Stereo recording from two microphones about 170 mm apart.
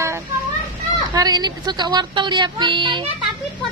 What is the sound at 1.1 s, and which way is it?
Speech, 25° right (ahead or behind).